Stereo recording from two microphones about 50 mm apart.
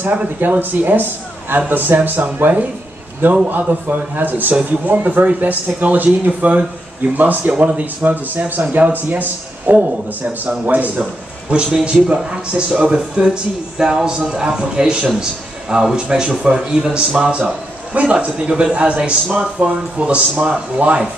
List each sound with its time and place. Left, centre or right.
0.4 s speech: right
11.8 s speech: centre
17.2 s speech: right